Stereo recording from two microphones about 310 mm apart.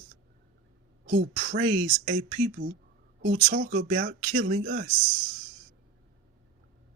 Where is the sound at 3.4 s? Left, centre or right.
Right.